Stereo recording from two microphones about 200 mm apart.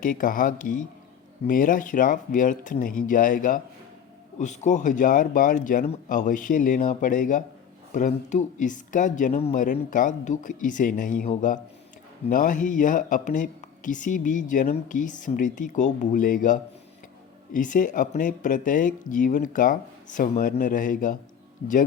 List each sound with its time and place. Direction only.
0.0 s speech: 40° left (ahead or behind)